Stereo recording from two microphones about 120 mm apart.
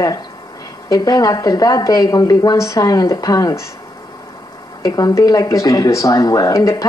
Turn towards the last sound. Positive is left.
turn(degrees=25)  # may be behind; listen again after turning